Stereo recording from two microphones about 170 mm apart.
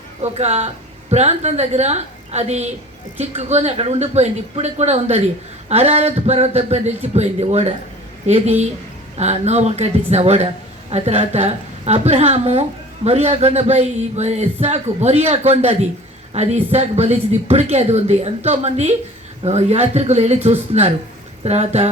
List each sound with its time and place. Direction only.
0.2 s speech: 40° right (ahead or behind)